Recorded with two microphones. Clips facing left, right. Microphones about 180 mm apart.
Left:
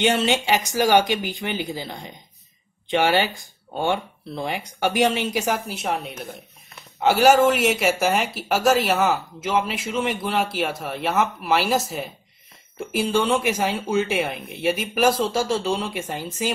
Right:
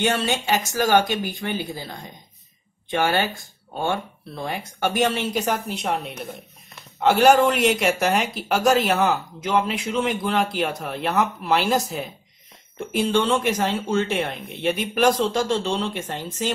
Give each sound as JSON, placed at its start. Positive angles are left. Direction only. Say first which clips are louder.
{"t": 0.0, "sound": "speech", "louder": "left 2 dB", "side_deg": 20}